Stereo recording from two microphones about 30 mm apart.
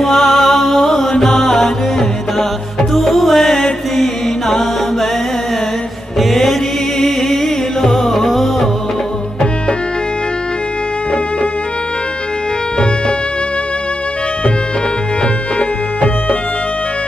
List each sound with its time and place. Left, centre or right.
0.0 s music: centre
3.9 s mantra: centre
6.1 s music: centre